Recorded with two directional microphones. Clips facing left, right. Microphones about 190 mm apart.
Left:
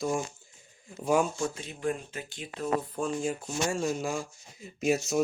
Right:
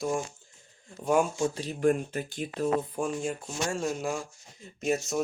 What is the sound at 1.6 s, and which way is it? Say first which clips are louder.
Speech: right 7 dB; 40° right (ahead or behind).